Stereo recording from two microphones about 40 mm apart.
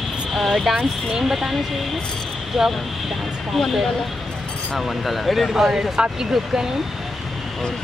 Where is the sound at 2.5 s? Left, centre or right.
Centre.